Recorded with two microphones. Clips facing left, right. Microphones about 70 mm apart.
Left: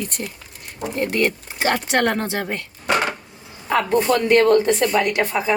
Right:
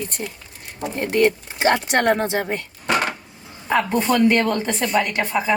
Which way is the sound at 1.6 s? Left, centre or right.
Right.